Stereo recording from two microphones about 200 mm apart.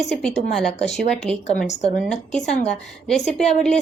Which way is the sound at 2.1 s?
5° left (ahead or behind).